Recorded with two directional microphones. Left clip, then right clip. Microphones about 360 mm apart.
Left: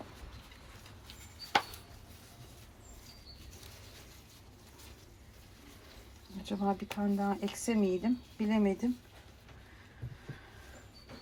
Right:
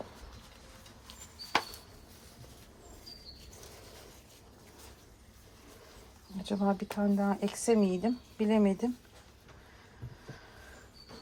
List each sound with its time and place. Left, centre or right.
6.4 s speech: right